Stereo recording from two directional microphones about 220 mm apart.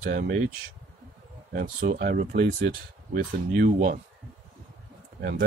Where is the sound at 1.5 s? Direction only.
45° right (ahead or behind).